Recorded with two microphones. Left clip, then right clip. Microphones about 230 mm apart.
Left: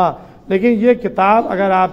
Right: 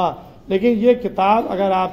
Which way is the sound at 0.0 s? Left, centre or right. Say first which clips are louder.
Left 5 dB; left.